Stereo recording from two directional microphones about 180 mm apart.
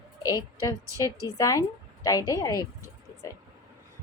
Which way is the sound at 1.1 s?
15° right (ahead or behind).